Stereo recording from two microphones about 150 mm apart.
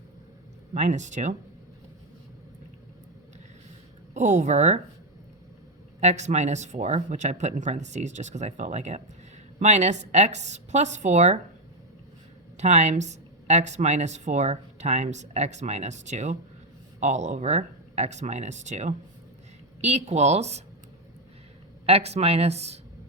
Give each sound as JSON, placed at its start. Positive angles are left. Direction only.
{"t": 0.7, "sound": "speech", "side_deg": -50}
{"t": 4.1, "sound": "speech", "side_deg": -55}
{"t": 6.0, "sound": "speech", "side_deg": -50}
{"t": 12.5, "sound": "speech", "side_deg": -50}
{"t": 21.8, "sound": "speech", "side_deg": -45}